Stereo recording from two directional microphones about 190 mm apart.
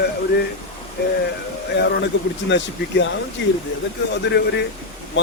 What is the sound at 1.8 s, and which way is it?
Speech, 65° left (ahead or behind).